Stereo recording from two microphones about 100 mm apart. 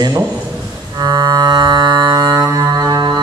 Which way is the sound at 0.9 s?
45° right (ahead or behind).